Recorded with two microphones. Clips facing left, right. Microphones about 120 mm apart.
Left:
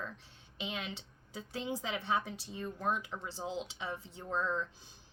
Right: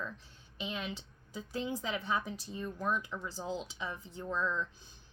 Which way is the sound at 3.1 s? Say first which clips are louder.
Right 1 dB; 30° left (ahead or behind).